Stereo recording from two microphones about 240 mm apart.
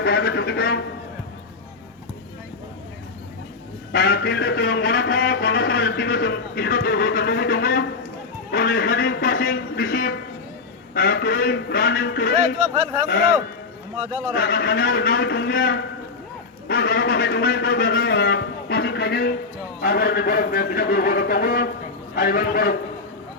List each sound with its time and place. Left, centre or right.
0.0 s a man's voice: left
3.9 s a man's voice: left
14.3 s a man's voice: left